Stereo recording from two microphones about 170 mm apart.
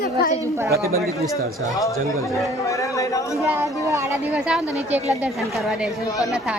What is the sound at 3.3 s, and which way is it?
A woman's voice, 15° right (ahead or behind).